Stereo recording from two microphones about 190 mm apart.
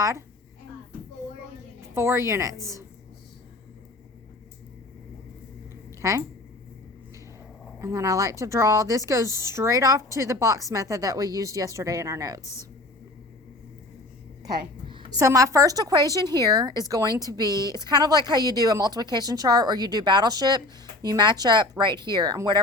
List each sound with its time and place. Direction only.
2.0 s a woman's voice: 15° right (ahead or behind)
6.0 s speech: 15° right (ahead or behind)
7.8 s a woman's voice: 15° right (ahead or behind)
14.4 s a woman's voice: 25° right (ahead or behind)